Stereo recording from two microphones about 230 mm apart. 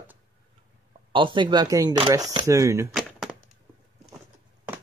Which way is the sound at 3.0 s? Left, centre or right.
Centre.